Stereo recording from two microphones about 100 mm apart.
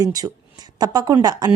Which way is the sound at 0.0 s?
40° right (ahead or behind).